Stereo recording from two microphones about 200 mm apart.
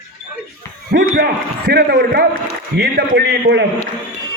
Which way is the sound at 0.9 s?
55° right (ahead or behind).